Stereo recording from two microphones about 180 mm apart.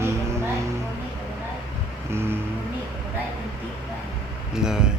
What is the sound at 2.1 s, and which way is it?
Music, 15° right (ahead or behind).